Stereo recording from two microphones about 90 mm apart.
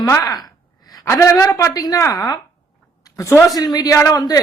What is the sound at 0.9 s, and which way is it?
A woman's voice, 35° left (ahead or behind).